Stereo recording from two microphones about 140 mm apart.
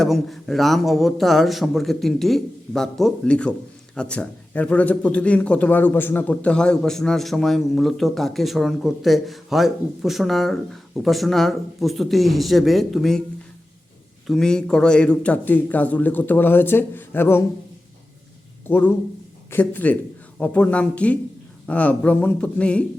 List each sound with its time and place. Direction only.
0.0 s speech: centre (ahead or behind)
14.3 s speech: 5° left (ahead or behind)
18.7 s speech: 15° left (ahead or behind)